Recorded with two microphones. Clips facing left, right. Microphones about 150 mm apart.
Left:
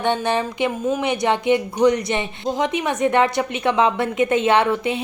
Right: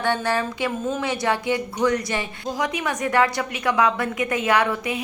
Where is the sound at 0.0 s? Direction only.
20° left (ahead or behind).